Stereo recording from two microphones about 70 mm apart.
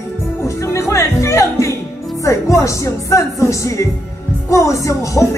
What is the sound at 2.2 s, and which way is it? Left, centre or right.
Speech, left.